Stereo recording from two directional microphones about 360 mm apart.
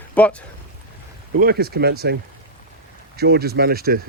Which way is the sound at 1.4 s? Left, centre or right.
Right.